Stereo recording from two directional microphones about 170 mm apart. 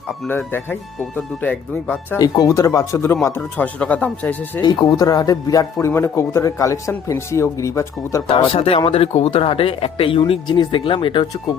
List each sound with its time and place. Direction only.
0.3 s a man's voice: 10° left (ahead or behind)
2.1 s a man's voice: 20° left (ahead or behind)
4.6 s a man's voice: 20° left (ahead or behind)
8.3 s speech: 35° left (ahead or behind)